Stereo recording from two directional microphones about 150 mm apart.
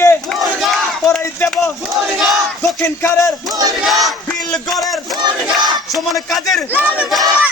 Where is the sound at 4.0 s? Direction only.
5° left (ahead or behind).